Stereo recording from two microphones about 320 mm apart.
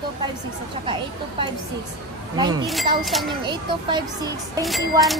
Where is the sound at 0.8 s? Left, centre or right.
Centre.